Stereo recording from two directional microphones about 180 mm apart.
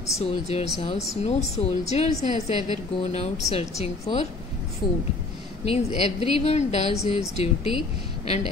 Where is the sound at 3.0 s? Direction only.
35° left (ahead or behind).